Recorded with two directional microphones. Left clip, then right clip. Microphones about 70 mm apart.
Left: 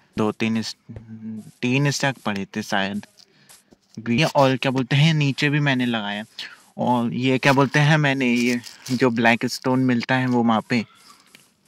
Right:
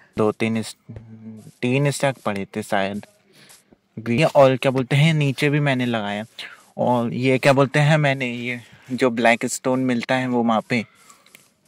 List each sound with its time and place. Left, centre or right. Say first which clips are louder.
0.1 s speech: right 3 dB; right
4.1 s speech: right 3 dB; right
6.3 s a sound: right 3 dB; right
7.1 s speech: right 2 dB; right